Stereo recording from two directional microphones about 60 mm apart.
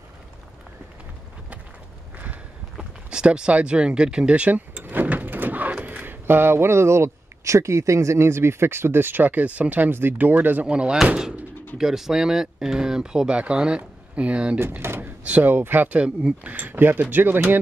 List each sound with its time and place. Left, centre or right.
2.8 s speech: centre
10.7 s speech: centre
11.8 s speech: centre
14.8 s drawer open or close: right
15.2 s speech: right
16.0 s speech: centre
16.5 s speech: right